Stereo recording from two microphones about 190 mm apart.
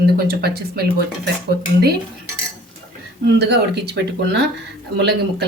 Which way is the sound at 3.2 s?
60° right (ahead or behind).